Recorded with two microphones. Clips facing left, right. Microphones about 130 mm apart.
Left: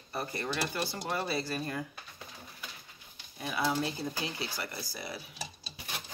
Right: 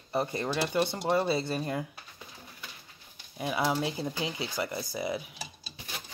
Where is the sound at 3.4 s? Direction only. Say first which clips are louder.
Right 3 dB; 20° right (ahead or behind).